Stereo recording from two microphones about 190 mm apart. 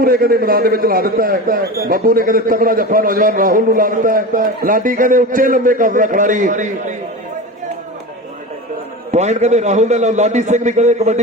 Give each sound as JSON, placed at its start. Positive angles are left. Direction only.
{"t": 0.0, "sound": "a man's voice", "side_deg": -50}
{"t": 9.1, "sound": "a man's voice", "side_deg": -35}